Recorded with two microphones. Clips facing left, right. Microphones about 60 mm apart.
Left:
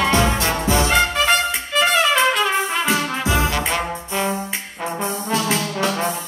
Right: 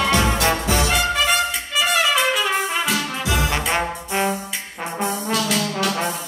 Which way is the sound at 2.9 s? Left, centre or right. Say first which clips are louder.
Left 3 dB; left.